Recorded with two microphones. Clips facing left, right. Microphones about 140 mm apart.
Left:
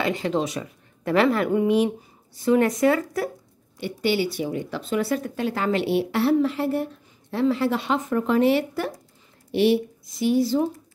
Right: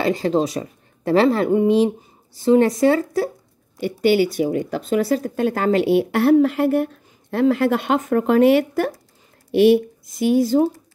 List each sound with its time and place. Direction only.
0.0 s speech: 35° right (ahead or behind)
3.7 s speech: 45° right (ahead or behind)